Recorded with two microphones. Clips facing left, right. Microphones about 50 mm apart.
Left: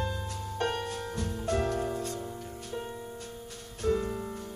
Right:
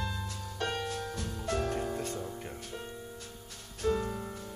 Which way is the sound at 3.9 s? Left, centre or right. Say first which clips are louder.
Left 6 dB; centre.